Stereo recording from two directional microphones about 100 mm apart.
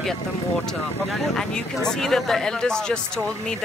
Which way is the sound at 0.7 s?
5° left (ahead or behind).